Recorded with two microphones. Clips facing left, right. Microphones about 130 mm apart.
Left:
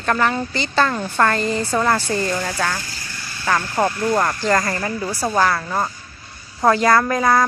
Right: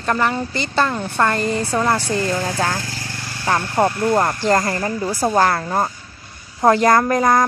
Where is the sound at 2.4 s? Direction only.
35° right (ahead or behind).